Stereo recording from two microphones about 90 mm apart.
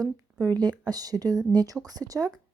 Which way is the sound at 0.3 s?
45° right (ahead or behind).